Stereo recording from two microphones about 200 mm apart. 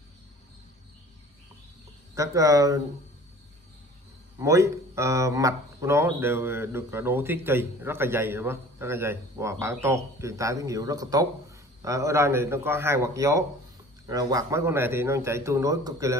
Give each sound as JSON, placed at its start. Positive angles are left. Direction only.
{"t": 2.1, "sound": "a man's voice", "side_deg": -15}
{"t": 4.4, "sound": "a man's voice", "side_deg": -15}